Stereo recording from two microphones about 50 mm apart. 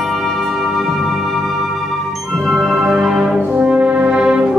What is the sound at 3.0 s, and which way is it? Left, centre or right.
Brass instrument, centre.